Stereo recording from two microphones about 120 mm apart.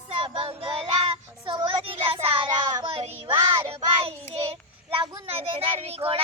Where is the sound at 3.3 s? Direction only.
50° right (ahead or behind).